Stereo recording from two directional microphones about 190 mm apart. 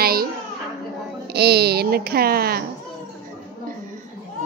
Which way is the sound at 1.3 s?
60° right (ahead or behind).